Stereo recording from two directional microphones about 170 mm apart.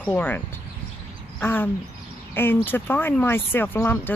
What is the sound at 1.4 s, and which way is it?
Speech, 10° left (ahead or behind).